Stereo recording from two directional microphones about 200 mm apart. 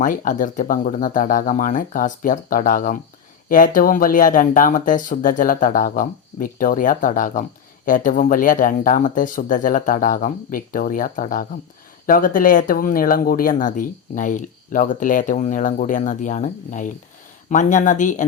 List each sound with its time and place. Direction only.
0.0 s speech: 40° left (ahead or behind)